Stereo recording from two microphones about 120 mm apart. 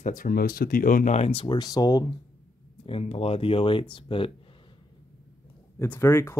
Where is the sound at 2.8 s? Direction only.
55° left (ahead or behind).